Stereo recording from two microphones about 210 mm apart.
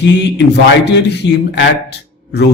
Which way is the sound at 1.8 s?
55° left (ahead or behind).